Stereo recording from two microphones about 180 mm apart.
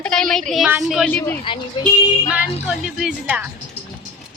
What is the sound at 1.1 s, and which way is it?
Speech, 10° left (ahead or behind).